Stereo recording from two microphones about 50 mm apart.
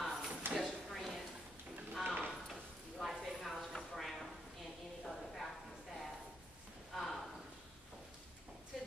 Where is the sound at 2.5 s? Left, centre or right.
Centre.